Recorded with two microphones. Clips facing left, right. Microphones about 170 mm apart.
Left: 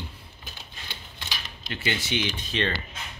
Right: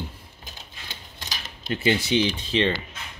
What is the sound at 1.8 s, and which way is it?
Speech, 35° right (ahead or behind).